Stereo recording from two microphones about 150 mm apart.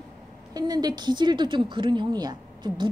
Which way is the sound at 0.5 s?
25° right (ahead or behind).